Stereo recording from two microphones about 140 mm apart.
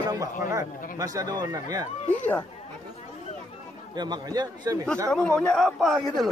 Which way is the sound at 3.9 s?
30° right (ahead or behind).